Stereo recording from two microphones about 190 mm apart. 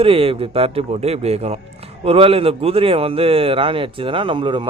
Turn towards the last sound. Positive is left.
turn(degrees=-25)  # may be behind; listen again after turning